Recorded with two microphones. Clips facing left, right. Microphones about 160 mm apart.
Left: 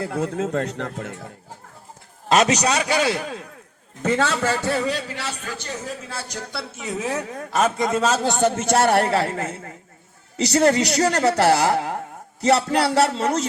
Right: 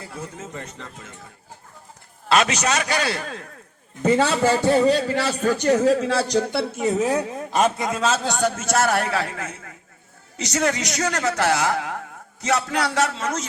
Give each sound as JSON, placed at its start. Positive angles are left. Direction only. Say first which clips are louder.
{"t": 0.0, "sound": "speech", "louder": "left 11 dB", "side_deg": 70}
{"t": 2.3, "sound": "speech", "louder": "left 2 dB", "side_deg": 40}
{"t": 2.6, "sound": "a man's voice", "louder": "left 2 dB", "side_deg": 15}
{"t": 4.0, "sound": "a man's voice", "louder": "right 3 dB", "side_deg": -10}
{"t": 4.7, "sound": "a man's voice", "louder": "right 7 dB", "side_deg": -30}
{"t": 5.6, "sound": "speech", "louder": "right 18 dB", "side_deg": -70}
{"t": 7.0, "sound": "a man's voice", "louder": "right 2 dB", "side_deg": -35}
{"t": 7.3, "sound": "a man's voice", "louder": "left 3 dB", "side_deg": -15}
{"t": 7.8, "sound": "a man's voice", "louder": "left 2 dB", "side_deg": 0}
{"t": 8.3, "sound": "a man's voice", "louder": "left 3 dB", "side_deg": 25}